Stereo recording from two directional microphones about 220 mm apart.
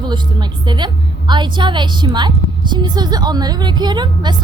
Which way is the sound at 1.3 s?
20° right (ahead or behind).